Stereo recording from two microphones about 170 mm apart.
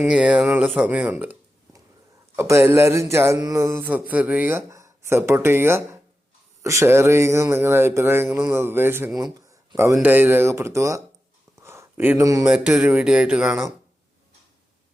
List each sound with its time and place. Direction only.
0.0 s speech: 5° right (ahead or behind)
11.6 s a sound: 15° right (ahead or behind)
12.5 s speech: 5° right (ahead or behind)